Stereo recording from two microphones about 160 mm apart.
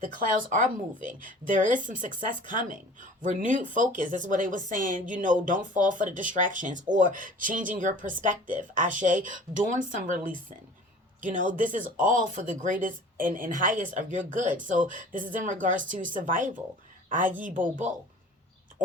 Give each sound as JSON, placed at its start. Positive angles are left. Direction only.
{"t": 0.2, "sound": "speech", "side_deg": -55}